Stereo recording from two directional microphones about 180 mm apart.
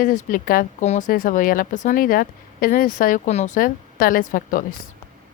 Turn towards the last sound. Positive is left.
turn(degrees=50)  # may be behind; listen again after turning